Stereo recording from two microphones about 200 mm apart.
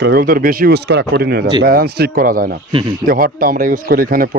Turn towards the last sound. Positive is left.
turn(degrees=-45)  # may be behind; listen again after turning